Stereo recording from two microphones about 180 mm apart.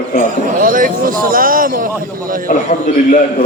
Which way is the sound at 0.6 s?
50° right (ahead or behind).